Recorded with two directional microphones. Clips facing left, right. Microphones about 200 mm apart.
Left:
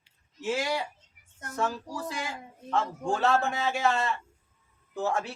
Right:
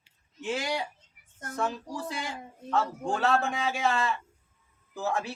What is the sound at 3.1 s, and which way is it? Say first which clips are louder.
Speech: left 1 dB; centre (ahead or behind).